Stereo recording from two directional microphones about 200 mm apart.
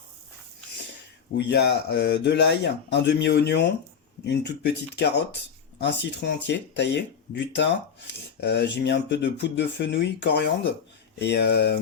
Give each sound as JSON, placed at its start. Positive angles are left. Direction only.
{"t": 1.4, "sound": "speech", "side_deg": 55}